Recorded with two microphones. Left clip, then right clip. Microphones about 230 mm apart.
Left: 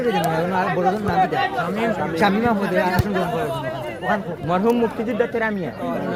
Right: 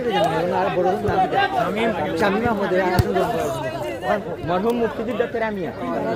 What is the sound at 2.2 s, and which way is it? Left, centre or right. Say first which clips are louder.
Speech: left 2 dB; left.